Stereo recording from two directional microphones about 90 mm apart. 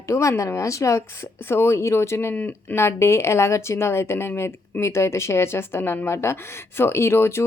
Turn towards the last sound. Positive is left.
turn(degrees=30)  # may be behind; listen again after turning